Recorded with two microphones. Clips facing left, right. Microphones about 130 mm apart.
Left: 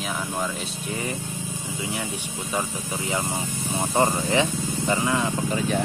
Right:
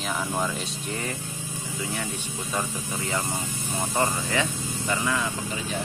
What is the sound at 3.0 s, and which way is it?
Speech, 20° left (ahead or behind).